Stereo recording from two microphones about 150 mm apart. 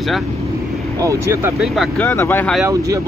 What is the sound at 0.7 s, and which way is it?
Vehicle, centre (ahead or behind).